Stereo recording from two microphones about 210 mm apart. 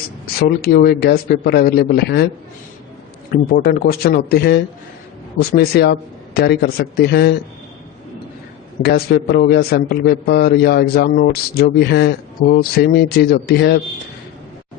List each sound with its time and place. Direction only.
0.3 s a man's voice: 50° left (ahead or behind)
3.5 s a man's voice: 45° left (ahead or behind)
8.8 s a man's voice: 50° left (ahead or behind)